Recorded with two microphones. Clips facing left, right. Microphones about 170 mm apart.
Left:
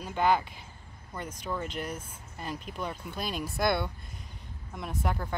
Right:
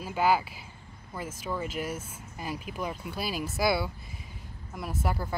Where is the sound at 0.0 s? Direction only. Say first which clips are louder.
Right 1 dB; 5° right (ahead or behind).